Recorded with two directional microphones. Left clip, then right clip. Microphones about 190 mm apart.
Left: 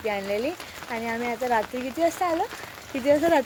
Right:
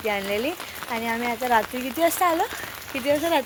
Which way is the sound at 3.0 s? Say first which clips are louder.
Left 2 dB; 30° left (ahead or behind).